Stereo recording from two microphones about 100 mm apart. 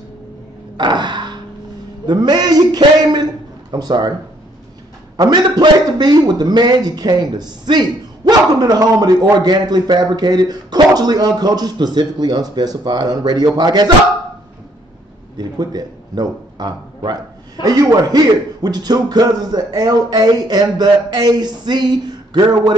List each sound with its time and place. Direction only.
0.7 s a sound: 50° right (ahead or behind)
2.0 s a man's voice: 45° right (ahead or behind)
5.1 s a man's voice: 45° right (ahead or behind)
15.3 s a man's voice: 40° right (ahead or behind)